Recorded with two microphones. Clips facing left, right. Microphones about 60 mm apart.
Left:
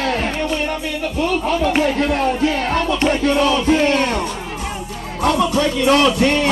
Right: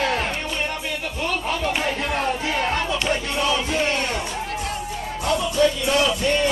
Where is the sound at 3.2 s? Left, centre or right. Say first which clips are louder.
Left 8 dB; left.